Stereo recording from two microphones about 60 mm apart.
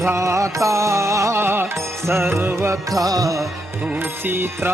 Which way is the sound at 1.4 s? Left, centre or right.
Right.